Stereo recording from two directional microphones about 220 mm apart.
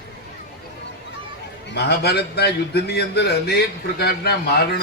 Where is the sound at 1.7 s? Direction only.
45° left (ahead or behind).